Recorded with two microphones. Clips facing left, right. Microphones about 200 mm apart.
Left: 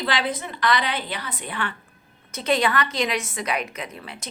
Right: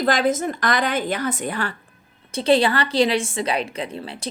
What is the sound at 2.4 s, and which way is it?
A woman's voice, 30° right (ahead or behind).